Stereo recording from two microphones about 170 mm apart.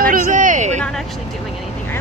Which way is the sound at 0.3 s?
50° right (ahead or behind).